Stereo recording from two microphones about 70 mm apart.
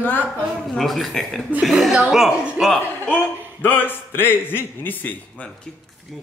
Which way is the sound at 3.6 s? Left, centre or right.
Left.